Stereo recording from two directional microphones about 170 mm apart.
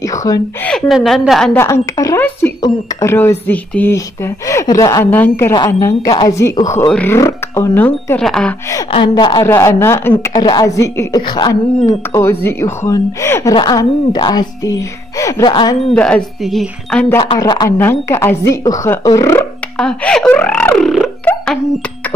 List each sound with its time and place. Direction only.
0.0 s speech: 20° left (ahead or behind)
0.7 s a woman's voice: centre (ahead or behind)
1.6 s a woman's voice: 20° left (ahead or behind)
6.9 s a woman's voice: 10° left (ahead or behind)
7.2 s a woman's voice: 20° left (ahead or behind)
8.9 s a woman's voice: 25° left (ahead or behind)
9.4 s a woman's voice: 15° left (ahead or behind)
15.9 s speech: 5° left (ahead or behind)
17.2 s a woman's voice: 25° left (ahead or behind)
19.8 s speech: 5° left (ahead or behind)